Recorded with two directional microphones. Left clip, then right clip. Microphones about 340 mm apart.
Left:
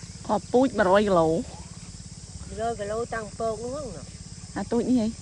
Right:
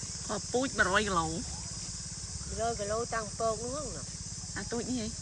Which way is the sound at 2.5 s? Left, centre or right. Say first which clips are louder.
Left 4 dB; left.